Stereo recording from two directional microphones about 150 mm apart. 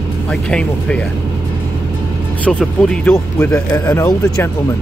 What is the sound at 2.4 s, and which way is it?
Speech, 5° left (ahead or behind).